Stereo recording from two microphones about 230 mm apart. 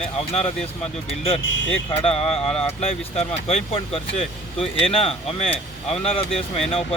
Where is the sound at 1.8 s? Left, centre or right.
Left.